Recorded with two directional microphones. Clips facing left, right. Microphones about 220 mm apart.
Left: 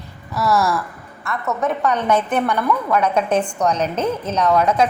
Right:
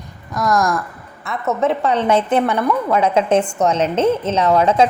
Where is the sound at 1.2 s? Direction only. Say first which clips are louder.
Right 3 dB; 25° right (ahead or behind).